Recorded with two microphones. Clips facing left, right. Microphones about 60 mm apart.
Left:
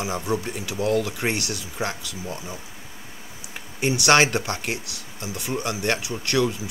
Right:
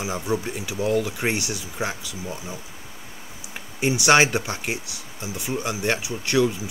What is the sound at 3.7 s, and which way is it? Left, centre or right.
Speech, centre.